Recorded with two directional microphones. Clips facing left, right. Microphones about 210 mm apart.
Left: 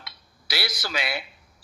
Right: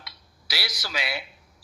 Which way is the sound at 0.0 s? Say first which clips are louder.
Left 1 dB; 55° left (ahead or behind).